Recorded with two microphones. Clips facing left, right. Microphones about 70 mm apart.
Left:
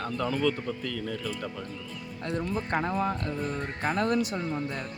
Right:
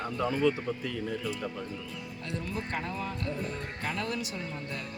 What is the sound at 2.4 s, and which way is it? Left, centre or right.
Speech, left.